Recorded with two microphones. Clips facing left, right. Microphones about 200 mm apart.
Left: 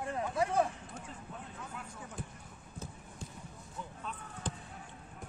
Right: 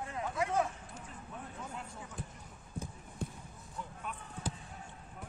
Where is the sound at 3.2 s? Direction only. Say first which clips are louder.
Right 8 dB; 60° right (ahead or behind).